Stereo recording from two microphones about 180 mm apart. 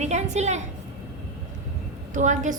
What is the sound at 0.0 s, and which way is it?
Speech, 40° right (ahead or behind).